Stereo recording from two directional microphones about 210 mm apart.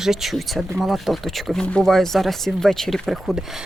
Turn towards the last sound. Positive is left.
turn(degrees=0)  # may be behind; listen again after turning